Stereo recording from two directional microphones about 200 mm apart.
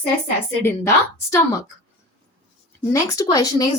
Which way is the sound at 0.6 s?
15° left (ahead or behind).